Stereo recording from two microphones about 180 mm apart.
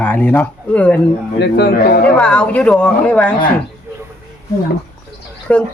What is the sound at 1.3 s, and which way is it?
Speech, 70° left (ahead or behind).